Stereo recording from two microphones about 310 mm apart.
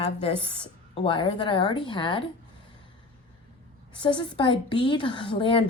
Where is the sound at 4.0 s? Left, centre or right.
Centre.